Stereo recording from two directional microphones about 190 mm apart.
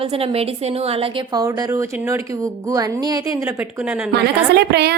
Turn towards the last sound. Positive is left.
turn(degrees=-60)  # may be behind; listen again after turning